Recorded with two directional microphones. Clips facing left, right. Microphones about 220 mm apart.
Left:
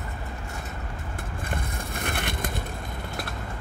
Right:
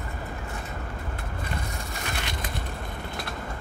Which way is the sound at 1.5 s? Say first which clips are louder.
Left 3 dB; 55° left (ahead or behind).